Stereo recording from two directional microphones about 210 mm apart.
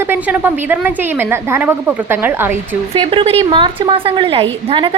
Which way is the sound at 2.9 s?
25° right (ahead or behind).